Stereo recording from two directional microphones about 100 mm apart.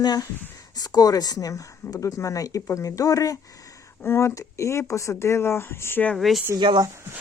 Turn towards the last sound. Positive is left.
turn(degrees=-50)  # may be behind; listen again after turning